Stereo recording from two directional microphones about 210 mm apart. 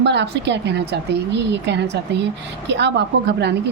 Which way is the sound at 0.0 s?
55° right (ahead or behind).